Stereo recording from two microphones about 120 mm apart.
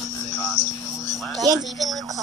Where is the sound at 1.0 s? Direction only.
30° right (ahead or behind).